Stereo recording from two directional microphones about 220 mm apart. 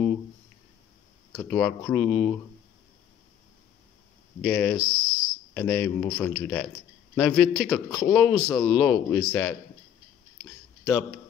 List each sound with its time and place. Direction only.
1.3 s speech: 5° left (ahead or behind)
4.4 s speech: 5° left (ahead or behind)
4.7 s speech: 80° left
5.5 s speech: 5° left (ahead or behind)